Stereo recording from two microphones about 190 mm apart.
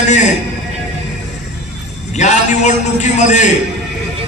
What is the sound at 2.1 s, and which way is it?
A man's voice, 35° left (ahead or behind).